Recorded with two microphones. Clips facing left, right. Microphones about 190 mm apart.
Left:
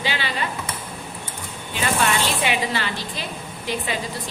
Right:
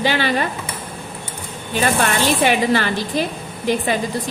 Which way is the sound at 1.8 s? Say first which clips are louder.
Right 4 dB; 50° right (ahead or behind).